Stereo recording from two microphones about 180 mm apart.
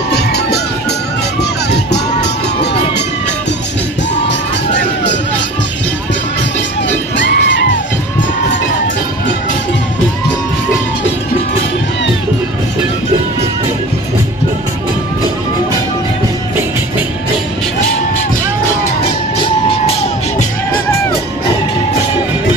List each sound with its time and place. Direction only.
0.1 s music: 65° left (ahead or behind)
4.3 s music: 80° left
7.2 s children shouting: 75° left (ahead or behind)